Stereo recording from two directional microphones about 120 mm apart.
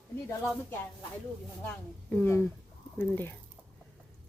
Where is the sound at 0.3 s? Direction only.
20° left (ahead or behind).